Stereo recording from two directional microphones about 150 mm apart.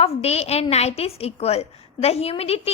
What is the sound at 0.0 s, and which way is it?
A woman's voice, 45° left (ahead or behind).